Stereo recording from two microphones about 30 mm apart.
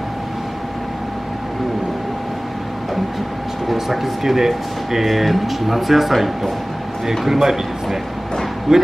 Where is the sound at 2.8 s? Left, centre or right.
Centre.